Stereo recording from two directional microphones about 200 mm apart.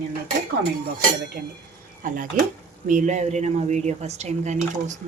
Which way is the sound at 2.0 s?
40° right (ahead or behind).